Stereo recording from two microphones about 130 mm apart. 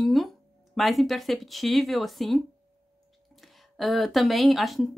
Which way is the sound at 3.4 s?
Centre (ahead or behind).